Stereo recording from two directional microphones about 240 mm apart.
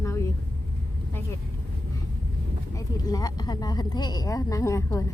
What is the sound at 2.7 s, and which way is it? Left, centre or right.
Speech, centre.